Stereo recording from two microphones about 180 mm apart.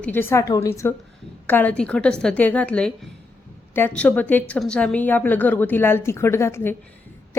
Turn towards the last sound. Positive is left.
turn(degrees=15)  # may be behind; listen again after turning